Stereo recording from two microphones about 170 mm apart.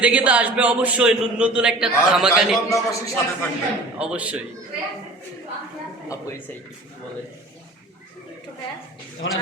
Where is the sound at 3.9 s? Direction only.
5° right (ahead or behind).